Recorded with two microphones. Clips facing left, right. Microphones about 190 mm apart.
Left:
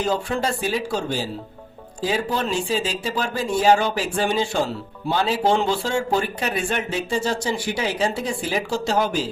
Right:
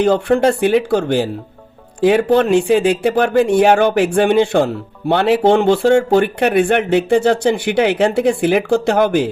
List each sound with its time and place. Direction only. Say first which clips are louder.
0.0 s speech: right 10 dB; 60° right (ahead or behind)